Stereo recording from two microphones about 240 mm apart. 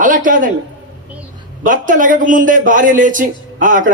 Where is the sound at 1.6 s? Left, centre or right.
Right.